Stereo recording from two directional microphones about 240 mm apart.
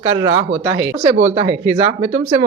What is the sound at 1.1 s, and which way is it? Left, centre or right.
Speech, right.